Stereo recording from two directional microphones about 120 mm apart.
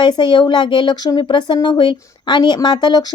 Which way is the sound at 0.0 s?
40° left (ahead or behind).